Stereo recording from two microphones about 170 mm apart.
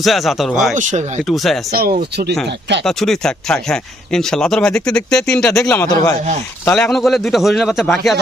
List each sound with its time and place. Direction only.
0.0 s speech: centre (ahead or behind)
0.8 s speech: 45° right (ahead or behind)
1.3 s speech: centre (ahead or behind)
1.7 s speech: 65° right (ahead or behind)
2.5 s speech: 90° right
2.8 s a man's voice: centre (ahead or behind)